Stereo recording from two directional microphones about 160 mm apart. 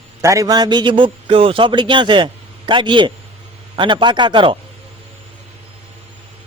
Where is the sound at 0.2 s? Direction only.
20° right (ahead or behind).